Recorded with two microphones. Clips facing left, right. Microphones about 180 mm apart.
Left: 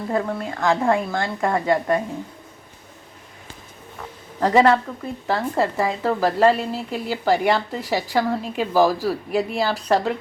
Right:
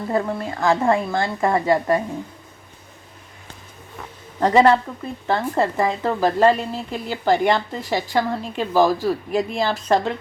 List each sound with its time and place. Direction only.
0.1 s a woman's voice: 5° right (ahead or behind)
4.4 s a woman's voice: centre (ahead or behind)